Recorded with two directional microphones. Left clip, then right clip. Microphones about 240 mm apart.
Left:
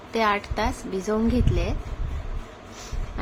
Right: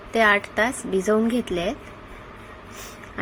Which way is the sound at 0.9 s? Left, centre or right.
Centre.